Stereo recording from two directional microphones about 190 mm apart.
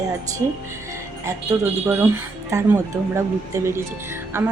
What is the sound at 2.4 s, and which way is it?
Speech, 15° right (ahead or behind).